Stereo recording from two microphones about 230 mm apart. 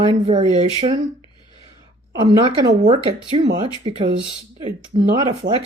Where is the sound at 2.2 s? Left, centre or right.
Centre.